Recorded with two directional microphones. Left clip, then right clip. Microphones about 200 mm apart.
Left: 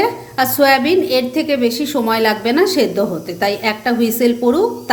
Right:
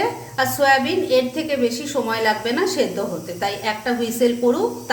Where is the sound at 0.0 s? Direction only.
40° left (ahead or behind).